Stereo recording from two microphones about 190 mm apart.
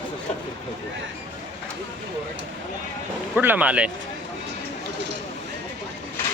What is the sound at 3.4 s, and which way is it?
Speech, 10° right (ahead or behind).